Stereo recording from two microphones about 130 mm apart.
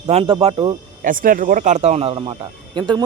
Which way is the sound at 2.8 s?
30° right (ahead or behind).